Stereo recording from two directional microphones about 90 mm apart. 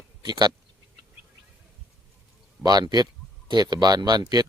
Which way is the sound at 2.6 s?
50° right (ahead or behind).